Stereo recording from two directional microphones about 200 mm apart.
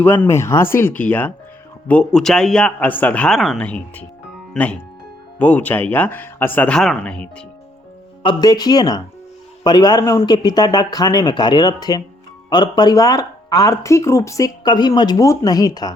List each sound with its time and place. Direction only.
0.0 s a man's voice: 10° left (ahead or behind)
8.2 s speech: 20° left (ahead or behind)